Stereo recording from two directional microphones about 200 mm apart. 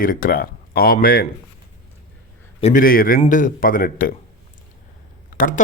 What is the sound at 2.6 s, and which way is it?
Speech, 40° left (ahead or behind).